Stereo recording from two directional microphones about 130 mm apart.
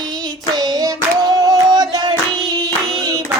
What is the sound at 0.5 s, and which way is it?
Child singing, 30° right (ahead or behind).